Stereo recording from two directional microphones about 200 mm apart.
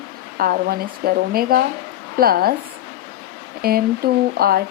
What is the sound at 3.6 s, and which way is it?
Speech, 50° right (ahead or behind).